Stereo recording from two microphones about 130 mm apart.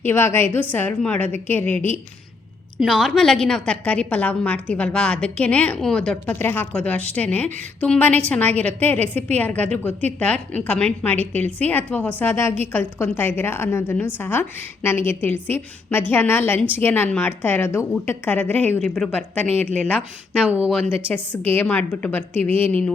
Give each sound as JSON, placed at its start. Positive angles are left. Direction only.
{"t": 0.0, "sound": "a woman's voice", "side_deg": 15}
{"t": 2.8, "sound": "a woman's voice", "side_deg": 0}
{"t": 21.1, "sound": "a woman's voice", "side_deg": 15}